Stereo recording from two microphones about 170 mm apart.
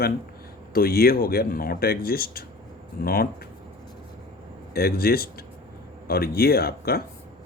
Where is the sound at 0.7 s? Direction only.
60° left (ahead or behind).